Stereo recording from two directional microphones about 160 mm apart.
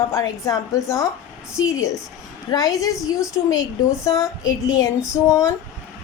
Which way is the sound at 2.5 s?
25° left (ahead or behind).